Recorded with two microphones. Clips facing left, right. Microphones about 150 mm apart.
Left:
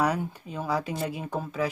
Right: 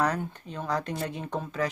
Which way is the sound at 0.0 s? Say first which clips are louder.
Left 1 dB; 10° left (ahead or behind).